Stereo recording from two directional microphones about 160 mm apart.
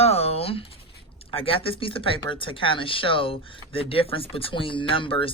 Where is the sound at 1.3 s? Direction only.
35° left (ahead or behind).